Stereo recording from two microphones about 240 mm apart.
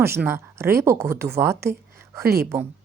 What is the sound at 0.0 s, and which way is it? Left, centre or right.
A woman's voice, centre.